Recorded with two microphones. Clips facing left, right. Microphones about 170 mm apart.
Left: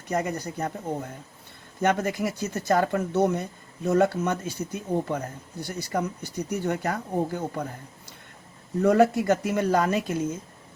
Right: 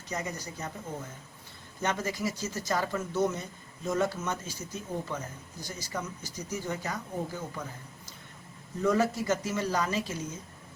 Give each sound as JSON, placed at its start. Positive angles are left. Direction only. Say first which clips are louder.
{"t": 0.1, "sound": "speech", "louder": "left 8 dB", "side_deg": 55}
{"t": 8.8, "sound": "speech", "louder": "left 7 dB", "side_deg": 60}